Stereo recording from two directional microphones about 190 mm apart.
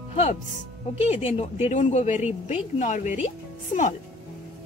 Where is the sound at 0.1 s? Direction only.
30° left (ahead or behind).